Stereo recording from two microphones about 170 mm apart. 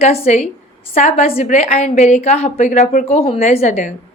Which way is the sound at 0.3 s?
40° left (ahead or behind).